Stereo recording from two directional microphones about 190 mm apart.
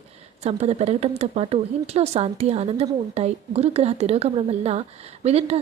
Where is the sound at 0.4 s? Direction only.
35° right (ahead or behind).